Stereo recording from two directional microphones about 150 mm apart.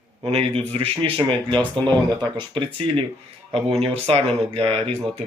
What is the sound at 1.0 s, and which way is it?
Speech, 35° right (ahead or behind).